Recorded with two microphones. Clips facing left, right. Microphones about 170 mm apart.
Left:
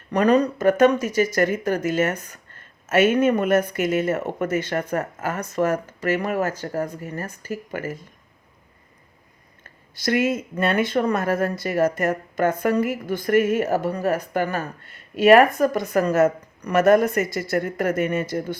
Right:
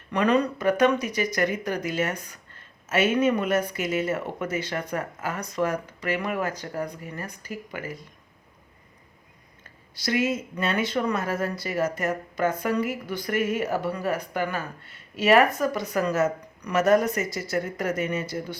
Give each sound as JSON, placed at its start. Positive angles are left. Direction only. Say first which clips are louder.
{"t": 0.1, "sound": "speech", "louder": "left 4 dB", "side_deg": 40}
{"t": 9.9, "sound": "speech", "louder": "left 4 dB", "side_deg": 50}